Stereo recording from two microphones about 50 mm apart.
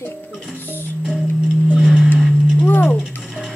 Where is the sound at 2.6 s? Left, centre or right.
Left.